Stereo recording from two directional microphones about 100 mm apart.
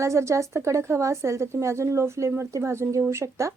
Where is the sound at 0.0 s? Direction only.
30° right (ahead or behind).